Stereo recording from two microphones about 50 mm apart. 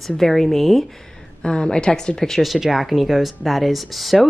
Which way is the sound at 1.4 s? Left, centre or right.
Centre.